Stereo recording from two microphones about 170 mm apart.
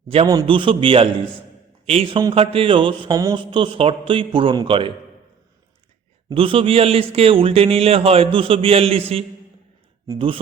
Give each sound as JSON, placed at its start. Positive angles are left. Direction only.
{"t": 0.3, "sound": "speech", "side_deg": -25}
{"t": 6.2, "sound": "speech", "side_deg": -30}